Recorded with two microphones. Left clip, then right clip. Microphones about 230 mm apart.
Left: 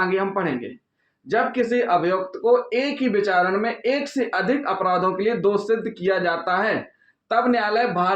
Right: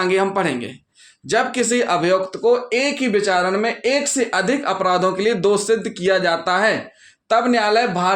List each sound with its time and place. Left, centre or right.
0.1 s speech: right